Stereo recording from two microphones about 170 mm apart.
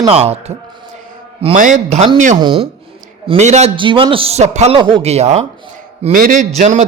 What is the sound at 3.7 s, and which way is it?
Speech, 30° right (ahead or behind).